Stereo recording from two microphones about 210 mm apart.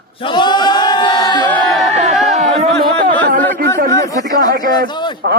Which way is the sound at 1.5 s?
5° left (ahead or behind).